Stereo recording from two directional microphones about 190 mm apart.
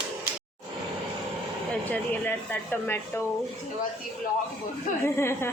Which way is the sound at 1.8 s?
10° left (ahead or behind).